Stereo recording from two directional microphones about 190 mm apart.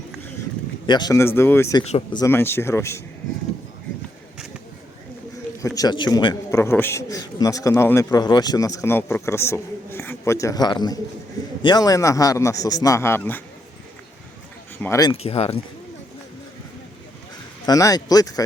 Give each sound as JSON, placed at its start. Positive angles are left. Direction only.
{"t": 0.9, "sound": "a man's voice", "side_deg": 20}
{"t": 1.8, "sound": "speech", "side_deg": 35}
{"t": 2.1, "sound": "a man's voice", "side_deg": 15}
{"t": 5.6, "sound": "a man's voice", "side_deg": 20}
{"t": 14.8, "sound": "a man's voice", "side_deg": 15}
{"t": 15.1, "sound": "speech", "side_deg": 30}
{"t": 17.7, "sound": "speech", "side_deg": 20}